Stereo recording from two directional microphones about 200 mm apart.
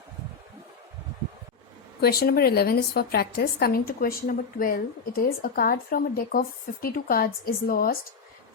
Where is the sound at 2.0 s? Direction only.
50° left (ahead or behind).